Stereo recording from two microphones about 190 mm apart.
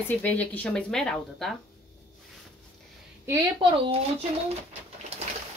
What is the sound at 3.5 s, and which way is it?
Speech, 30° right (ahead or behind).